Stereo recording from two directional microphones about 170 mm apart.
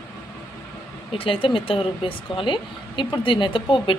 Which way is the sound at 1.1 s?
30° left (ahead or behind).